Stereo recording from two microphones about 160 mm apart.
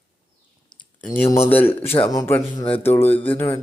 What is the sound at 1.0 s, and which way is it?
Speech, 15° left (ahead or behind).